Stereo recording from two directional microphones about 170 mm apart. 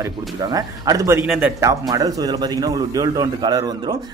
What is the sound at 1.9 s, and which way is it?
A man's voice, 20° right (ahead or behind).